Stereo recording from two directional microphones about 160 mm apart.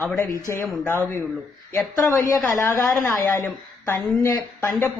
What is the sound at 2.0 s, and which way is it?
A woman's voice, 15° left (ahead or behind).